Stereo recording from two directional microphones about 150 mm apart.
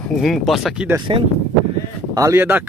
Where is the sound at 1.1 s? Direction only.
35° right (ahead or behind).